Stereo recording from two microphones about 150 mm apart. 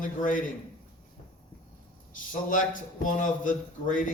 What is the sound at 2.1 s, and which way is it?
A man's voice, 65° left (ahead or behind).